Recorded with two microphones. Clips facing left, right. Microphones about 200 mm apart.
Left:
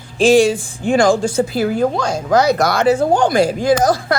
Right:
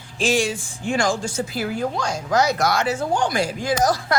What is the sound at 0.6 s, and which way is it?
Speech, 60° left (ahead or behind).